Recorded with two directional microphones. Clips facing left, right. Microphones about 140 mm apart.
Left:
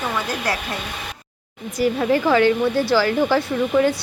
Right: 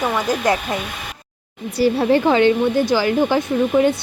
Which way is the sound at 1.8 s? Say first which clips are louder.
Right 3 dB; 30° right (ahead or behind).